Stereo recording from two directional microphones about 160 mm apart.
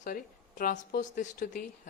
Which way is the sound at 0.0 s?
55° left (ahead or behind).